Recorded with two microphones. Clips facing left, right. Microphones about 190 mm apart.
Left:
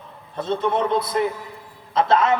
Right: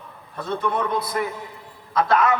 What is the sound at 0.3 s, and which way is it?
A man's voice, 25° left (ahead or behind).